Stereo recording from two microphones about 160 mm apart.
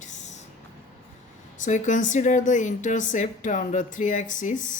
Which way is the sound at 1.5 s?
50° left (ahead or behind).